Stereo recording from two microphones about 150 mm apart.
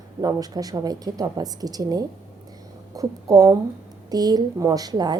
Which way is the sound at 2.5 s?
25° right (ahead or behind).